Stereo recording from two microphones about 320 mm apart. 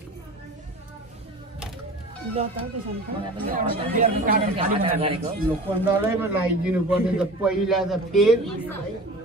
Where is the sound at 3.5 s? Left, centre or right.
Right.